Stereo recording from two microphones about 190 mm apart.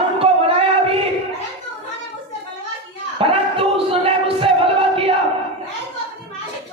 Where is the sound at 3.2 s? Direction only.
30° right (ahead or behind).